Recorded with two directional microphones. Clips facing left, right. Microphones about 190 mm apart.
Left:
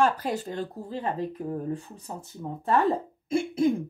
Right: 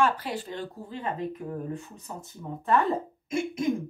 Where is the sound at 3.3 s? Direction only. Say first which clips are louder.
Left 4 dB; 30° left (ahead or behind).